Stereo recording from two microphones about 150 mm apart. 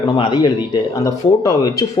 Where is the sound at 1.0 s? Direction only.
20° left (ahead or behind).